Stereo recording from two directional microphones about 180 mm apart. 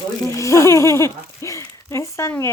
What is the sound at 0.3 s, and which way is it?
Speech, 15° left (ahead or behind).